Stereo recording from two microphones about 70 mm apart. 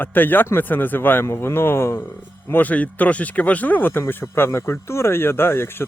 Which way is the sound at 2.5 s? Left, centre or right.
Left.